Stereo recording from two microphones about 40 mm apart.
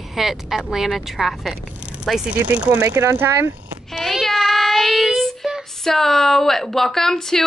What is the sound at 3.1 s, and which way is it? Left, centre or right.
Speech, right.